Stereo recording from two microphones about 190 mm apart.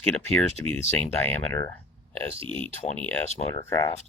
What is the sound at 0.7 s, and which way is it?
Speech, 10° left (ahead or behind).